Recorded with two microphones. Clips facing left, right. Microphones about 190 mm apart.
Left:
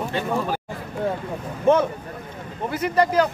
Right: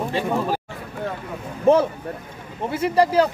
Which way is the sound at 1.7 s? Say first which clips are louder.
Right 2 dB; 35° right (ahead or behind).